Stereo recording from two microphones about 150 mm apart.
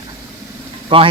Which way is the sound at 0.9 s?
35° right (ahead or behind).